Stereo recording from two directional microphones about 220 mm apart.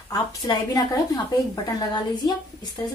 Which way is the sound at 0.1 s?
15° left (ahead or behind).